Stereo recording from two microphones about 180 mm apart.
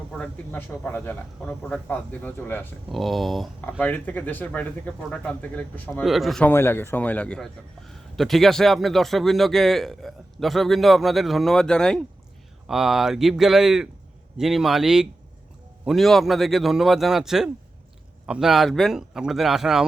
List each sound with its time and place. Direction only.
0.1 s speech: 10° left (ahead or behind)
6.5 s a man's voice: 15° left (ahead or behind); by 19.8 s 5° right (ahead or behind)